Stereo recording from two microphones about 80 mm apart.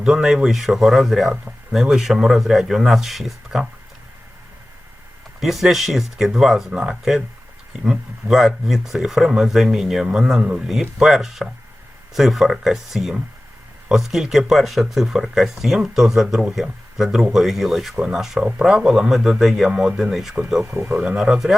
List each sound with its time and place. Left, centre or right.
0.0 s speech: centre
5.4 s speech: centre
20.7 s speech: right
20.9 s speech: centre
21.2 s speech: centre